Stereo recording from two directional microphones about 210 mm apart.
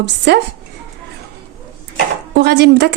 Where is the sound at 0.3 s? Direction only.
50° right (ahead or behind).